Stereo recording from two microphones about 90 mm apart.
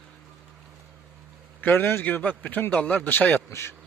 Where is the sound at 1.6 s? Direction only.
20° left (ahead or behind).